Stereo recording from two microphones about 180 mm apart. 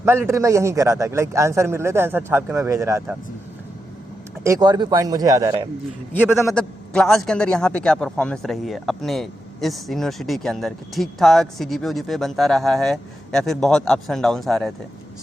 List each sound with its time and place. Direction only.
0.0 s a man's voice: 15° right (ahead or behind)
4.4 s speech: 20° right (ahead or behind)
6.5 s a man's voice: 5° left (ahead or behind)